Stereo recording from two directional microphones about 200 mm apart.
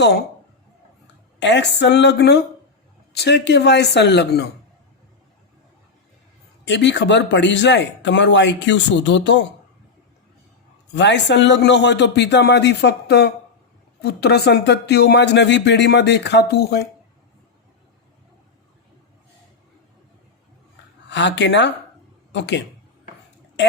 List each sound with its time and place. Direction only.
1.4 s speech: 60° left (ahead or behind)
6.7 s speech: 60° left (ahead or behind)
10.9 s speech: 60° left (ahead or behind)
21.1 s speech: 60° left (ahead or behind)